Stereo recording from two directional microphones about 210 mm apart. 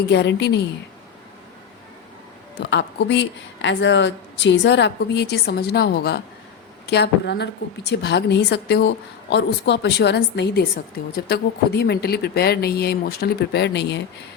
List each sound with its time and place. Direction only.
0.1 s a woman's voice: 55° left (ahead or behind)
2.6 s a woman's voice: 55° left (ahead or behind)